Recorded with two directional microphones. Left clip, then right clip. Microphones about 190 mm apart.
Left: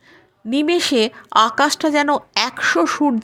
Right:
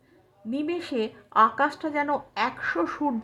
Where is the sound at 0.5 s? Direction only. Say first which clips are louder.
Left 12 dB; 30° left (ahead or behind).